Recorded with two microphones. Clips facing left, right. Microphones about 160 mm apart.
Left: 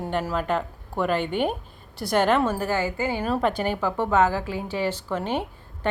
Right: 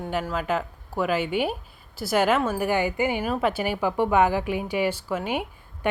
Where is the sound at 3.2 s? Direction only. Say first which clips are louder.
Left 1 dB; 5° right (ahead or behind).